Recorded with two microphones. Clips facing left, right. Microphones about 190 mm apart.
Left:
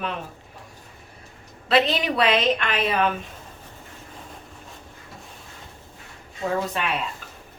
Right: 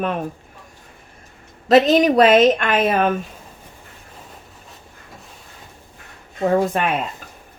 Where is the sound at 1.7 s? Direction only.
45° right (ahead or behind).